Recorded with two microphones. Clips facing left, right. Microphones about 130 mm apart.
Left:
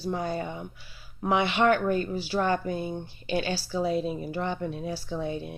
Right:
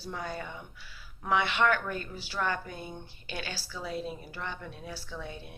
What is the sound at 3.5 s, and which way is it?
Speech, 35° left (ahead or behind).